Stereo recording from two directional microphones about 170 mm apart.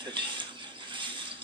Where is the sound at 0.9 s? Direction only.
30° right (ahead or behind).